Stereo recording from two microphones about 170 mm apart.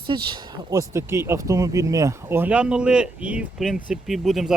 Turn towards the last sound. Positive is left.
turn(degrees=0)  # may be behind; listen again after turning